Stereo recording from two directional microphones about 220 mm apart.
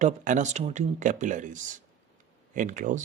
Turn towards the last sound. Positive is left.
turn(degrees=-35)  # may be behind; listen again after turning